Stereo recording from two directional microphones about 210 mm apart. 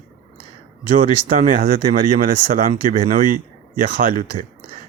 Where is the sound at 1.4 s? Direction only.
40° right (ahead or behind).